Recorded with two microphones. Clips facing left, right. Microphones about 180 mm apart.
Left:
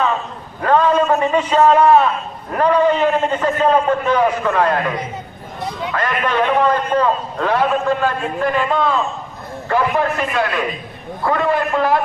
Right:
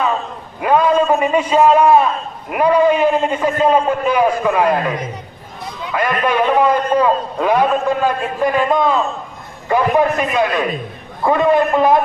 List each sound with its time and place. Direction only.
0.6 s a man's voice: 10° right (ahead or behind)